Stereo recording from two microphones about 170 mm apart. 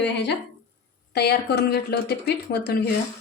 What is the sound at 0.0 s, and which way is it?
Speech, 90° left.